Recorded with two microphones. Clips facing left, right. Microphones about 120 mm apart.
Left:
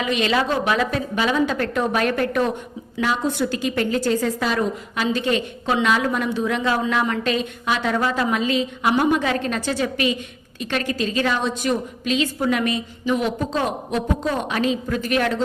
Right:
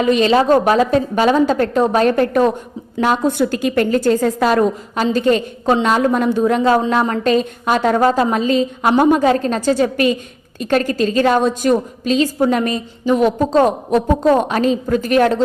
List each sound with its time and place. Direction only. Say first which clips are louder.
0.0 s a woman's voice: right 8 dB; 40° right (ahead or behind)
3.0 s a woman's voice: right 6 dB; 50° right (ahead or behind)